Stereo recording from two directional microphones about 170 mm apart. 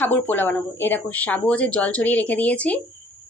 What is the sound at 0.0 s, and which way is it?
Speech, 10° left (ahead or behind).